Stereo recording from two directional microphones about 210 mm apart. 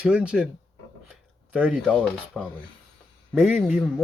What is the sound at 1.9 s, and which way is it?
Speech, centre (ahead or behind).